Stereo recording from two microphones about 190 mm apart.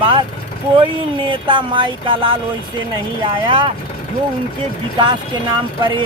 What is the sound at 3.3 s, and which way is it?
Speech, 25° right (ahead or behind).